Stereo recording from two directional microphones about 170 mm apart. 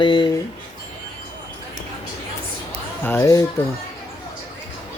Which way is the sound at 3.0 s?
15° left (ahead or behind).